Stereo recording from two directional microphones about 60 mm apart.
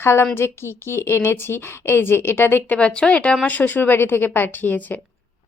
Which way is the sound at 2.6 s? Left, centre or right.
Centre.